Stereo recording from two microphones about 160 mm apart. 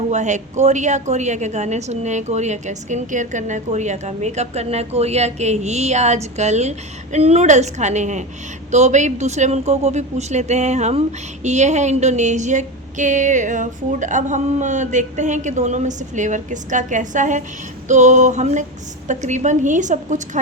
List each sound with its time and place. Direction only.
0.1 s a woman's voice: 45° right (ahead or behind)